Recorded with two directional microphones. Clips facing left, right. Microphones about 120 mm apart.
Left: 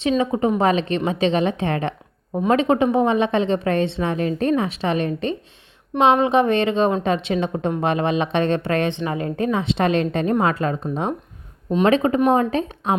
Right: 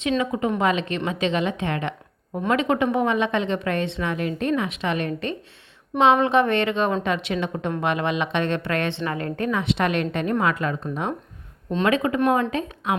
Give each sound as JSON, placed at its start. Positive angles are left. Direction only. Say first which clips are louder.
{"t": 0.2, "sound": "a woman's voice", "louder": "left 4 dB", "side_deg": 30}